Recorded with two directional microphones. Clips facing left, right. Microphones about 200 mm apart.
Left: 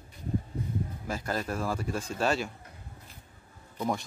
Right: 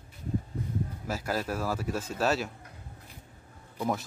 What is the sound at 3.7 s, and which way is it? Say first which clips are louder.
Speech: even; 5° right (ahead or behind).